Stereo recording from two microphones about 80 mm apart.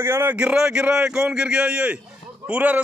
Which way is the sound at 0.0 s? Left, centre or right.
Right.